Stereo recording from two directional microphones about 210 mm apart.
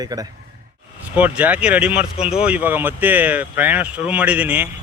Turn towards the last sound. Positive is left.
turn(degrees=-5)  # may be behind; listen again after turning